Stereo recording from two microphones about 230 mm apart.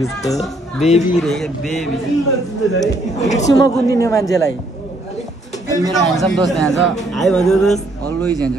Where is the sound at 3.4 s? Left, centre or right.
Centre.